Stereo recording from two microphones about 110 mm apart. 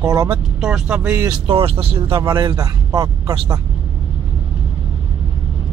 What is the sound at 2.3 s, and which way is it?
A man's voice, 35° right (ahead or behind).